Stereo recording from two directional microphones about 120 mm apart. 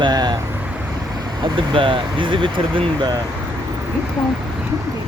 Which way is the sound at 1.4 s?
45° right (ahead or behind).